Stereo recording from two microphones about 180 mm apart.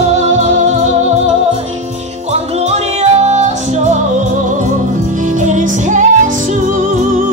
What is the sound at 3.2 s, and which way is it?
Music, 40° right (ahead or behind).